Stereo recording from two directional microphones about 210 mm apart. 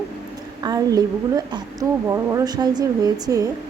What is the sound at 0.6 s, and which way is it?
A woman's voice, 15° right (ahead or behind).